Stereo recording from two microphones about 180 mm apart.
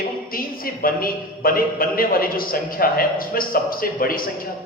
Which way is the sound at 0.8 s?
55° left (ahead or behind).